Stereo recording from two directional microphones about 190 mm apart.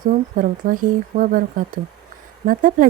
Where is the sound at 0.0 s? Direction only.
45° right (ahead or behind).